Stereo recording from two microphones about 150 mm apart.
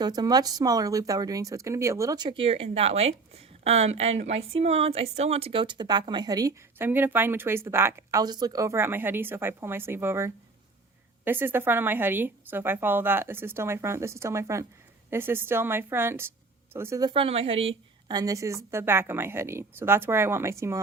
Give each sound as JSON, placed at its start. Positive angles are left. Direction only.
{"t": 0.0, "sound": "speech", "side_deg": -25}
{"t": 6.7, "sound": "speech", "side_deg": -15}
{"t": 17.1, "sound": "speech", "side_deg": -40}
{"t": 18.1, "sound": "speech", "side_deg": -25}